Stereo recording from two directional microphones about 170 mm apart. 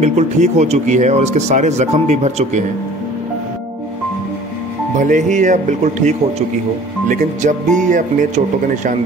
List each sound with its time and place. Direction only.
0.0 s speech: 40° right (ahead or behind)
4.9 s speech: 50° right (ahead or behind)